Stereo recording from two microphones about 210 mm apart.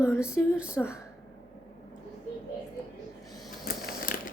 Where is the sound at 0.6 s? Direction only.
5° right (ahead or behind).